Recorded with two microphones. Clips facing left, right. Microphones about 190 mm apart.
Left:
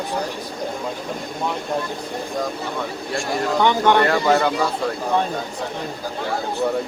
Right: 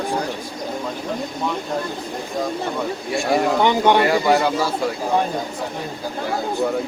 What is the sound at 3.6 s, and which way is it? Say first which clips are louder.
Speech: left 2 dB; 15° right (ahead or behind).